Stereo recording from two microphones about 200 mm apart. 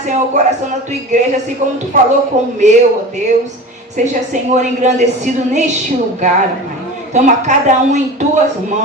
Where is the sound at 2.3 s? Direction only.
35° right (ahead or behind).